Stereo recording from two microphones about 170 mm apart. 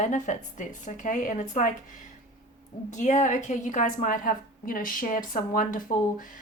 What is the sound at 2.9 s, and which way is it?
A woman's voice, 45° left (ahead or behind).